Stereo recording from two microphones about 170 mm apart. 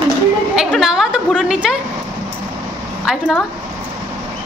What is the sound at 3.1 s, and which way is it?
Speech, 5° right (ahead or behind).